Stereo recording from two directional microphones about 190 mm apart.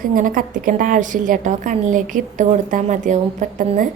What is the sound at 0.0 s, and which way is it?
A woman's voice, 45° right (ahead or behind).